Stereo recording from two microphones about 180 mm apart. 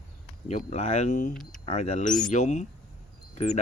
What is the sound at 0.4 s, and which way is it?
Speech, 35° left (ahead or behind).